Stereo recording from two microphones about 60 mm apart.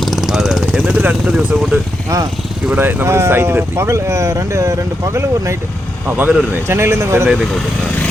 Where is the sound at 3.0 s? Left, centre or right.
Right.